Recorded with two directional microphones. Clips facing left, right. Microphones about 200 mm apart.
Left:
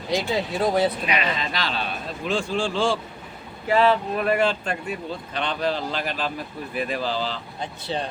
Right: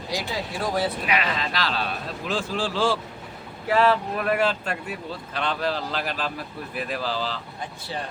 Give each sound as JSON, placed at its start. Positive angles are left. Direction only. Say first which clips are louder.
{"t": 0.1, "sound": "speech", "louder": "left 6 dB", "side_deg": 20}
{"t": 1.0, "sound": "speech", "louder": "even", "side_deg": 0}
{"t": 7.6, "sound": "speech", "louder": "left 6 dB", "side_deg": 25}